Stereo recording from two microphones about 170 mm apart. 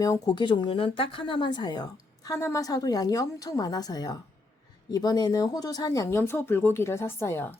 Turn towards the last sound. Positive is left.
turn(degrees=15)  # may be behind; listen again after turning